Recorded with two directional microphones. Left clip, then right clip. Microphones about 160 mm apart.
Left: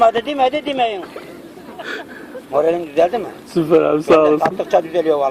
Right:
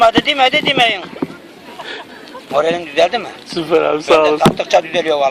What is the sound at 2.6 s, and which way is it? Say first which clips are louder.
Speech: even; 5° left (ahead or behind).